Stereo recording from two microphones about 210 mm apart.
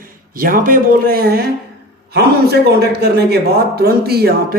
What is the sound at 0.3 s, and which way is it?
A man's voice, 40° right (ahead or behind).